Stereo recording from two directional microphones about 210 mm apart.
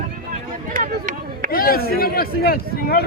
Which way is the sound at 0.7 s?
40° right (ahead or behind).